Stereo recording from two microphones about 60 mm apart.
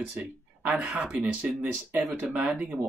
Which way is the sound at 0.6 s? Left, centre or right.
Right.